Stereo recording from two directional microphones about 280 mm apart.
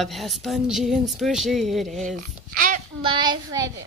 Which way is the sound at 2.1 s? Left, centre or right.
Right.